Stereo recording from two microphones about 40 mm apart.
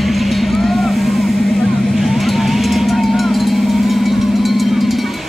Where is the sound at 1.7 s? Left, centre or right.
Centre.